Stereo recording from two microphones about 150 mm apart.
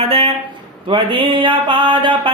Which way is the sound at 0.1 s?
40° right (ahead or behind).